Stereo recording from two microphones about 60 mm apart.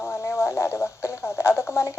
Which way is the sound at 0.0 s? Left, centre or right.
Left.